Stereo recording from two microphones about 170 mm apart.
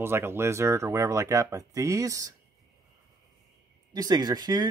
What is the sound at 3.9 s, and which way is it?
Speech, 25° right (ahead or behind).